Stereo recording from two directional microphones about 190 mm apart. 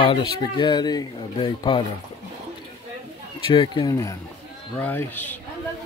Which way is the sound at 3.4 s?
25° left (ahead or behind).